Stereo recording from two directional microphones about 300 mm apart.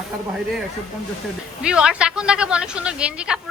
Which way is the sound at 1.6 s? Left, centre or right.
Centre.